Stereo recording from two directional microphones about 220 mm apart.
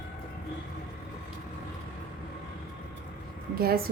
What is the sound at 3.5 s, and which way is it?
Speech, 45° right (ahead or behind).